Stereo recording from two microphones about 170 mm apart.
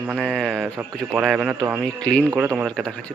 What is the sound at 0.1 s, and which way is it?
Speech, 5° right (ahead or behind).